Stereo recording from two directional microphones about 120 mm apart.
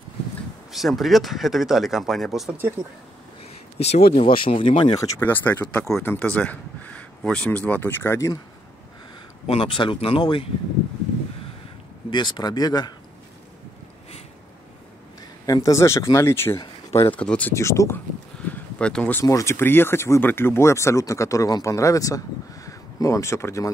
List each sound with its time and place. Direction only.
0.7 s speech: centre (ahead or behind)
3.8 s speech: 60° left (ahead or behind); by 4.9 s 45° left (ahead or behind)
5.2 s speech: 15° left (ahead or behind)
9.5 s speech: 50° left (ahead or behind)
12.1 s speech: 40° left (ahead or behind)
15.4 s speech: 30° left (ahead or behind); by 17.6 s 10° left (ahead or behind)
17.6 s speech: 25° left (ahead or behind)
18.5 s a sound: 10° left (ahead or behind)
19.2 s speech: 25° left (ahead or behind)